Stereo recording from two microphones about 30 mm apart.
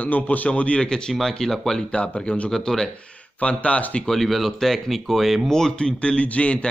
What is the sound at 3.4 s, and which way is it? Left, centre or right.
Speech, left.